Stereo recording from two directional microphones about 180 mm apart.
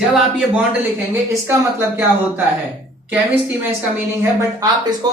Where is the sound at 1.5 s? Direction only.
15° right (ahead or behind).